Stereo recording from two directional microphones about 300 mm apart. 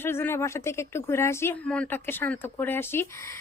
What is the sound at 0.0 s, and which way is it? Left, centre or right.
Speech, centre.